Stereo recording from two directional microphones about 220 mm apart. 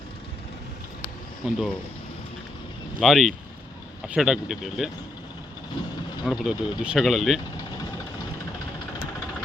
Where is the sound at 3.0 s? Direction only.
Centre (ahead or behind).